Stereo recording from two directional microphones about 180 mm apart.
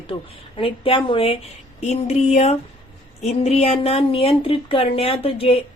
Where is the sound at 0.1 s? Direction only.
30° left (ahead or behind).